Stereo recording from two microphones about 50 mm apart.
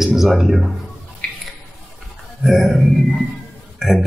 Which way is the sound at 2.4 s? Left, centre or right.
Centre.